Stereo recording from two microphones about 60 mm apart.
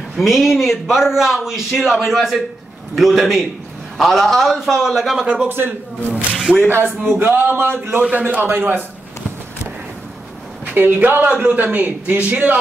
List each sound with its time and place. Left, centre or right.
0.2 s a man's voice: centre
5.2 s a man's voice: right
5.5 s a man's voice: right
8.0 s a man's voice: right
8.5 s a man's voice: right
10.6 s a sound: right
11.2 s a man's voice: right